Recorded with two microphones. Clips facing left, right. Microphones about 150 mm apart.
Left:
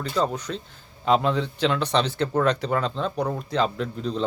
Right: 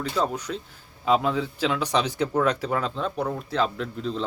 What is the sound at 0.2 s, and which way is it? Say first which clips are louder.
Speech: left 2 dB; 10° right (ahead or behind).